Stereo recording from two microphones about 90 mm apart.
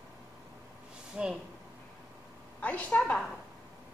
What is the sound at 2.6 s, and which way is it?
Speech, 15° left (ahead or behind).